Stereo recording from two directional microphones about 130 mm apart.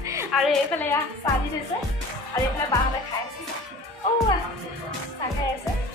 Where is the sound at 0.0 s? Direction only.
20° right (ahead or behind).